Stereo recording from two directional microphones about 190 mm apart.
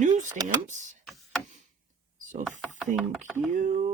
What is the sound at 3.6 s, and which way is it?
Speech, 40° right (ahead or behind).